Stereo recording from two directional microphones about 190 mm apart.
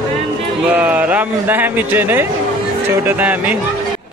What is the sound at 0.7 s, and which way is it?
A man's voice, 10° right (ahead or behind).